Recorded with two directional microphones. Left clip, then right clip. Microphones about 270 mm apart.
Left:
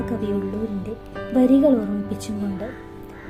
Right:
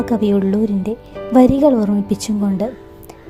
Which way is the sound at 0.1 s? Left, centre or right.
Right.